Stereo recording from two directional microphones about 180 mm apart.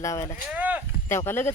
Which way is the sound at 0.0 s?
15° left (ahead or behind).